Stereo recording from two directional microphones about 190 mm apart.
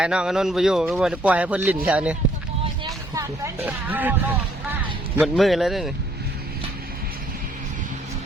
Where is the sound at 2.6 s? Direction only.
20° right (ahead or behind).